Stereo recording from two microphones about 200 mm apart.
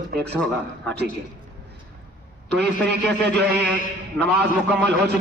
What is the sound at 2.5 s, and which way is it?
A man's voice, 60° right (ahead or behind).